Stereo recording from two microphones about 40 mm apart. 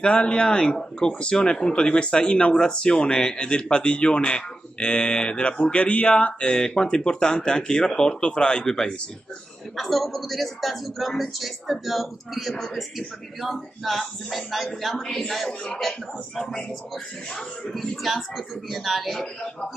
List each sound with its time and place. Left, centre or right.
0.0 s speech: left
6.6 s a man's voice: left
9.8 s a man's voice: centre